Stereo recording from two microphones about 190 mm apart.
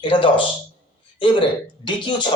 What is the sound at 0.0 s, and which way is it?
Speech, 25° left (ahead or behind).